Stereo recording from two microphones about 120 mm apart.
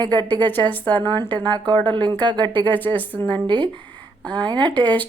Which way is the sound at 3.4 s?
40° right (ahead or behind).